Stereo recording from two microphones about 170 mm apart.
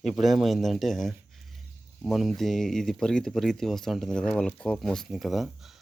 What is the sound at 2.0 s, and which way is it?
Speech, centre (ahead or behind).